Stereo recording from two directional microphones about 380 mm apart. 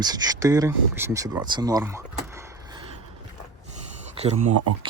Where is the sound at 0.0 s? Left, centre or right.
Centre.